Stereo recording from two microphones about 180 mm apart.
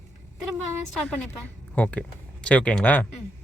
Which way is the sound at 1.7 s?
5° left (ahead or behind).